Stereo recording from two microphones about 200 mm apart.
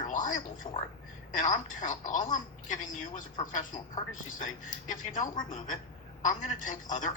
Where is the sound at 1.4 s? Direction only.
40° left (ahead or behind).